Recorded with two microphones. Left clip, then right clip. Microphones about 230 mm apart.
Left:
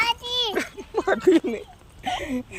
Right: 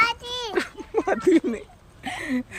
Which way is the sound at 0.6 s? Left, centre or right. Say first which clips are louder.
Right 1 dB; right.